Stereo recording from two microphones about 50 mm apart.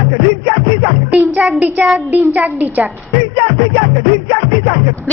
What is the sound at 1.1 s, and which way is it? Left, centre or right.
Music, right.